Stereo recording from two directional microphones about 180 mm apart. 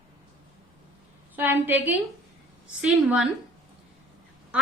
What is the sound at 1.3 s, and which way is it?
A woman's voice, 10° right (ahead or behind).